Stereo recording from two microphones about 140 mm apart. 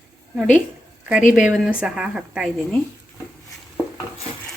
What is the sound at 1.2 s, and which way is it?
Speech, 65° left (ahead or behind).